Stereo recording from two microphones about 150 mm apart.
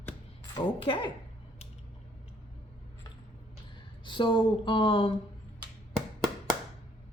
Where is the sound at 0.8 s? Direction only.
35° left (ahead or behind).